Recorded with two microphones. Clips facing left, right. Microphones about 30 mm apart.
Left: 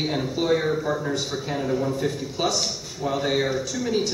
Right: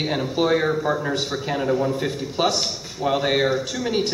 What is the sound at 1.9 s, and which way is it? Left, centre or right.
A man's voice, right.